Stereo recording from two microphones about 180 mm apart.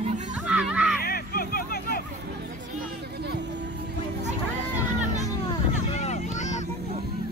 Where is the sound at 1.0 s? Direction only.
55° left (ahead or behind).